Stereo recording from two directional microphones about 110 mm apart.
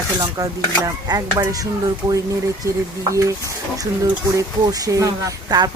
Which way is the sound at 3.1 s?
30° right (ahead or behind).